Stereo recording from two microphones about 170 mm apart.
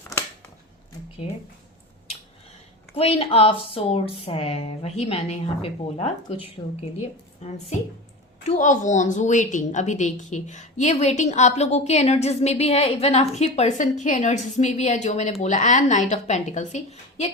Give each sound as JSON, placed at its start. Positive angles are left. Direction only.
{"t": 0.0, "sound": "a sound", "side_deg": 15}
{"t": 2.9, "sound": "a woman's voice", "side_deg": 35}
{"t": 7.4, "sound": "a woman's voice", "side_deg": 40}